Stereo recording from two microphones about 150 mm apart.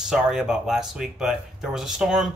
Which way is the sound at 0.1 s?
5° right (ahead or behind).